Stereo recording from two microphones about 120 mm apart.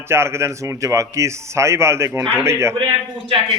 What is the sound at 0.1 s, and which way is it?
Speech, 20° right (ahead or behind).